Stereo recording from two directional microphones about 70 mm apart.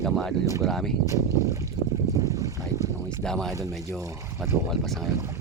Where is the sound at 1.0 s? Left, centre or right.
Right.